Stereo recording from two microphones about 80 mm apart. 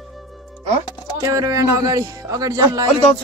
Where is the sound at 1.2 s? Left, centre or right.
Right.